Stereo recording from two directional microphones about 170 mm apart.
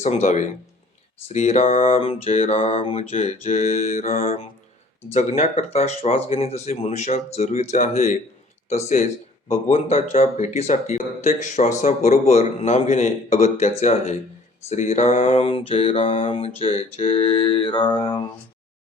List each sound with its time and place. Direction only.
0.0 s speech: 40° left (ahead or behind); by 18.2 s 25° left (ahead or behind)